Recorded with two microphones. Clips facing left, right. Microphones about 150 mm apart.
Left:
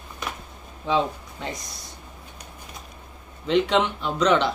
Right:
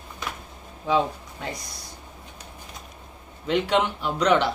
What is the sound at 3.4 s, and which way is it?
Speech, 10° right (ahead or behind).